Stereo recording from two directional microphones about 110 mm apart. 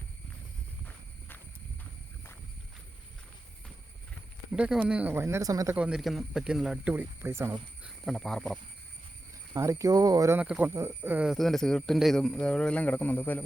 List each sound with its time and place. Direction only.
1.8 s walk: 20° left (ahead or behind)
4.5 s speech: 10° right (ahead or behind); by 5.7 s 30° right (ahead or behind)
5.7 s speech: 10° right (ahead or behind)
6.9 s speech: 20° right (ahead or behind)
8.0 s speech: 5° left (ahead or behind)
9.6 s speech: 25° right (ahead or behind)
10.3 s speech: 10° right (ahead or behind)
11.3 s speech: 5° left (ahead or behind)